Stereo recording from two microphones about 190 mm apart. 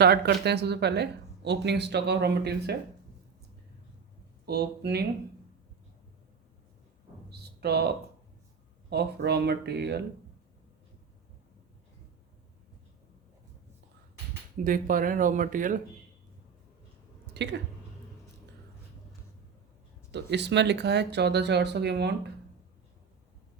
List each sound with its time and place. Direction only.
0.0 s speech: 60° right (ahead or behind)
4.4 s speech: 60° right (ahead or behind)
7.3 s music: 55° right (ahead or behind)
8.9 s speech: 60° right (ahead or behind)
14.6 s speech: 45° right (ahead or behind)
17.3 s speech: 65° right (ahead or behind)
20.1 s speech: 65° right (ahead or behind)